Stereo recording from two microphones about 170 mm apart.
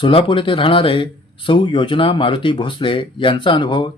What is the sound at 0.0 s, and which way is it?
Speech, 30° left (ahead or behind).